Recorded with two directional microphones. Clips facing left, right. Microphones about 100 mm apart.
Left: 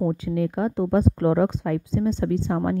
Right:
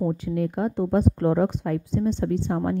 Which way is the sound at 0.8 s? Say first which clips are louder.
Left 1 dB; 90° left.